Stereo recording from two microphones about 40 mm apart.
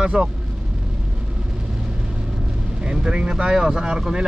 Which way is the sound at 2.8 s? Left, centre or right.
Right.